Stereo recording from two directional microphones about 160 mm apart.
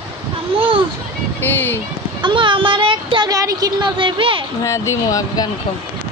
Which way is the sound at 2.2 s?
30° right (ahead or behind).